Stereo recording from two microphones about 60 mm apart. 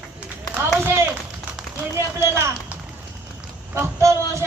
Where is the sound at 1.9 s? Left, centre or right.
Right.